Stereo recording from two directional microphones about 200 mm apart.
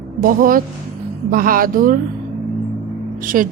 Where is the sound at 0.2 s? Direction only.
45° right (ahead or behind).